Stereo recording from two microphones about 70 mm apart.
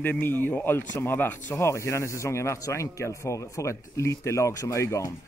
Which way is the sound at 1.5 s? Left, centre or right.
Left.